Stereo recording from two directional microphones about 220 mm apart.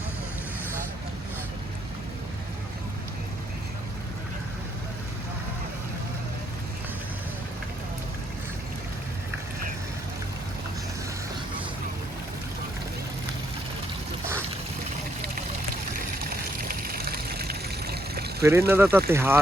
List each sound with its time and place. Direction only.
16.3 s trickle: 40° right (ahead or behind)
18.4 s speech: 10° right (ahead or behind)